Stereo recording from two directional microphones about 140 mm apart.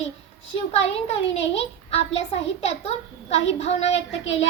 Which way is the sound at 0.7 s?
45° left (ahead or behind).